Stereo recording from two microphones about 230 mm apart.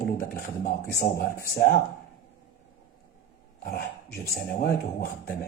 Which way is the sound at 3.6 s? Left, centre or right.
Left.